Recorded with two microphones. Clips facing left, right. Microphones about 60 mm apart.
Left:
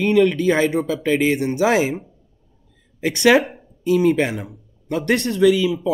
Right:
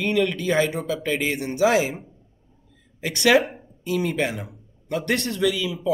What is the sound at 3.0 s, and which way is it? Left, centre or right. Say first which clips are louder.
A man's voice: left 3 dB; left.